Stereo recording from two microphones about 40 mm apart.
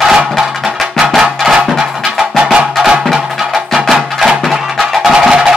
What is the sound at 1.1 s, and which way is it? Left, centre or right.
Music, centre.